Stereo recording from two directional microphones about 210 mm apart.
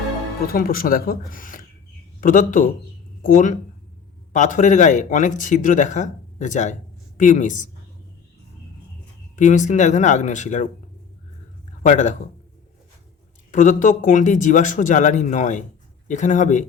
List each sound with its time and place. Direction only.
0.4 s speech: 45° left (ahead or behind)
9.3 s speech: 35° left (ahead or behind)
11.8 s speech: 35° left (ahead or behind)
13.5 s speech: 35° left (ahead or behind)